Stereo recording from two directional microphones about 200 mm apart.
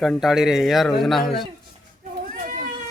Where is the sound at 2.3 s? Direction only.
40° right (ahead or behind).